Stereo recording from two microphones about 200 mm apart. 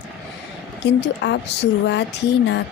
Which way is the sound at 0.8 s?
60° left (ahead or behind).